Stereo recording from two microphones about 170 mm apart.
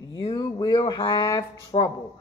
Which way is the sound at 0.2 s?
25° left (ahead or behind).